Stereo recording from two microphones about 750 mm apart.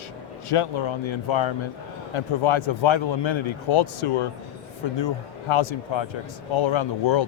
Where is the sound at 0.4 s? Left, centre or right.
Left.